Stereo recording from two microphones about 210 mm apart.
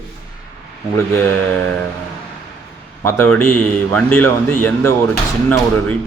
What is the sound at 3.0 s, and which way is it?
A man's voice, 10° left (ahead or behind).